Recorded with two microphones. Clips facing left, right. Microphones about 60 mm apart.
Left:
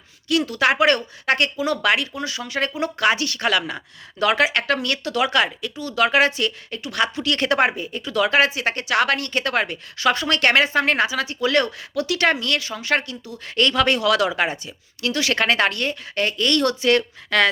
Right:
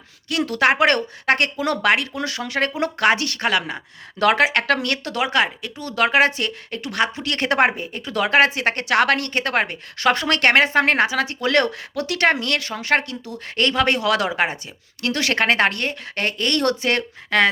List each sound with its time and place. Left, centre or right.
0.6 s speech: right
2.1 s speech: right
3.4 s speech: right
4.2 s speech: right
4.6 s speech: right
5.1 s speech: right
7.0 s speech: right
9.3 s speech: right
13.6 s speech: right
15.0 s speech: right
17.0 s speech: right